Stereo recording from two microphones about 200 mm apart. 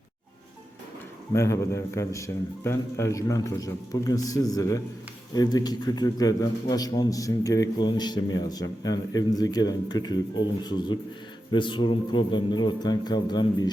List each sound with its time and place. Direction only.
1.3 s a man's voice: 15° left (ahead or behind)